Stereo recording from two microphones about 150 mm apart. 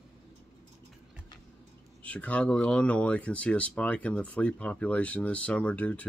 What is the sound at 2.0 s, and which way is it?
Speech, 10° left (ahead or behind).